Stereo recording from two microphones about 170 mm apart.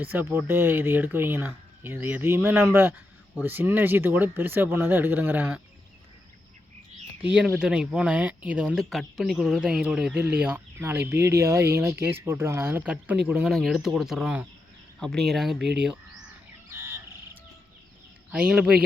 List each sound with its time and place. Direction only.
0.0 s speech: 10° right (ahead or behind)
7.2 s speech: 5° right (ahead or behind)
16.6 s goose: 15° right (ahead or behind)
18.3 s speech: 10° right (ahead or behind)